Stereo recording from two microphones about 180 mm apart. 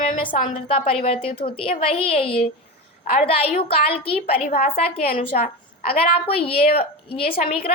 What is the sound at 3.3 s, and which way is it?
A woman's voice, 35° left (ahead or behind).